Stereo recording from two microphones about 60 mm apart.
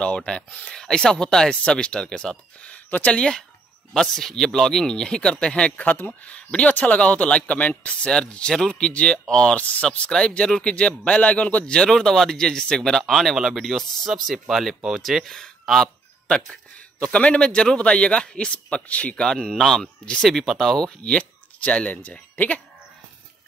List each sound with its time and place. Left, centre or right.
0.0 s speech: centre
2.7 s a man's voice: left
8.0 s speech: centre
17.0 s a man's voice: centre
19.2 s speech: centre
21.0 s speech: centre